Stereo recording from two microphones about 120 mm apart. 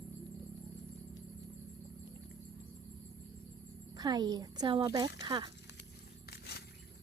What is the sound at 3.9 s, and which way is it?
Speech, 30° right (ahead or behind).